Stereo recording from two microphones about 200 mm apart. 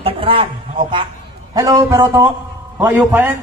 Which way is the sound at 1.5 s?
15° right (ahead or behind).